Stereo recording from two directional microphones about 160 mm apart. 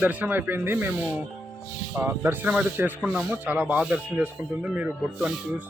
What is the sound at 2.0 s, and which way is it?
Speech, 15° right (ahead or behind).